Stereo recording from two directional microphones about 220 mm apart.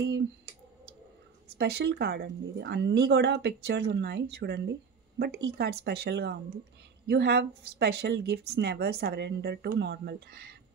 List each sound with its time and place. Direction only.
1.5 s speech: 45° right (ahead or behind)